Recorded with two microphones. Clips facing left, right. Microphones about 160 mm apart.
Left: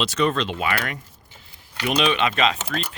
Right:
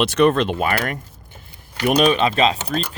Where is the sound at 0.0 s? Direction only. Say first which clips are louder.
Right 6 dB; 55° right (ahead or behind).